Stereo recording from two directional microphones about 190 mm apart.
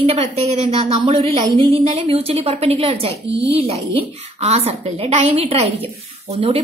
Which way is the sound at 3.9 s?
35° right (ahead or behind).